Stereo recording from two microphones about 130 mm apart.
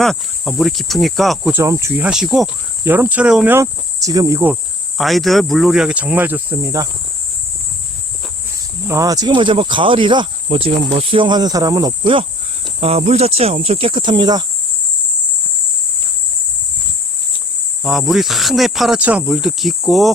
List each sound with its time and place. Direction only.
0.0 s speech: centre (ahead or behind)
1.5 s speech: 20° right (ahead or behind)
2.0 s speech: 5° right (ahead or behind)
2.8 s speech: 15° right (ahead or behind)
3.5 s speech: 25° right (ahead or behind)
4.9 s speech: centre (ahead or behind)
8.9 s speech: 25° right (ahead or behind)
12.8 s speech: 55° right (ahead or behind); by 14.4 s 35° right (ahead or behind)
17.8 s speech: 5° right (ahead or behind)